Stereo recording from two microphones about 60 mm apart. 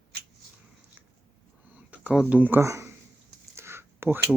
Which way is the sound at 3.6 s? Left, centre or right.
Right.